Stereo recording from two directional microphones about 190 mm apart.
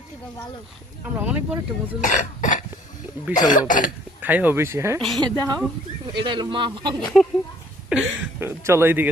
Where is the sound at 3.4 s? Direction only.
45° left (ahead or behind).